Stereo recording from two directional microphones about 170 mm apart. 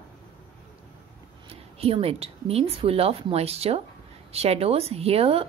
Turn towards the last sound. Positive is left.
turn(degrees=-35)  # may be behind; listen again after turning